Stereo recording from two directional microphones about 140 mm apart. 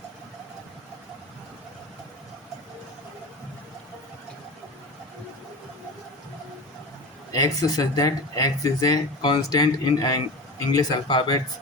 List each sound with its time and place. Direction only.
7.3 s speech: 25° left (ahead or behind)